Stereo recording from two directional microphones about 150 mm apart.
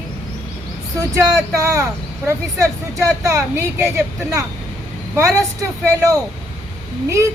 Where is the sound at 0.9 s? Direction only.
20° right (ahead or behind).